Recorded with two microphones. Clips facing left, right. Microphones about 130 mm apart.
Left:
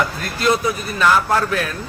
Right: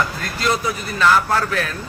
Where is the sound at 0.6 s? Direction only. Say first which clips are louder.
Left 1 dB; 25° left (ahead or behind).